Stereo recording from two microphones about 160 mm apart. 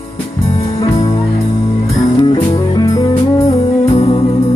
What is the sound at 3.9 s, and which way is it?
Music, 40° left (ahead or behind).